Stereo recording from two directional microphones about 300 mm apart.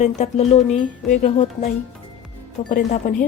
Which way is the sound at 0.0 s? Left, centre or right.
Left.